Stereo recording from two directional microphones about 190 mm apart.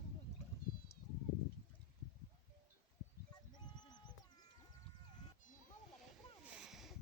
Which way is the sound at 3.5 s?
20° left (ahead or behind).